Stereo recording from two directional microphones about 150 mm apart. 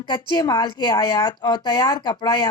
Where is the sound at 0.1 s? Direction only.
30° left (ahead or behind).